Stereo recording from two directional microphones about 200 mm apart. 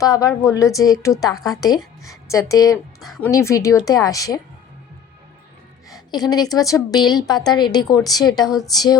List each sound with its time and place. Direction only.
0.0 s a woman's voice: 15° left (ahead or behind)
3.0 s a woman's voice: centre (ahead or behind)
3.2 s a woman's voice: 15° left (ahead or behind)
5.9 s a woman's voice: 20° left (ahead or behind)